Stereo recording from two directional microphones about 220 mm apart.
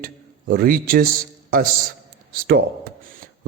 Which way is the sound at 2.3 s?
40° right (ahead or behind).